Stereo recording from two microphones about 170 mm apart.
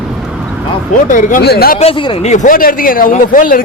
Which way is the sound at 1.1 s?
60° left (ahead or behind).